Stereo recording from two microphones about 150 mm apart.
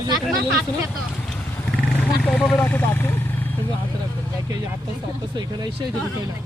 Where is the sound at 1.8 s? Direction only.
5° left (ahead or behind).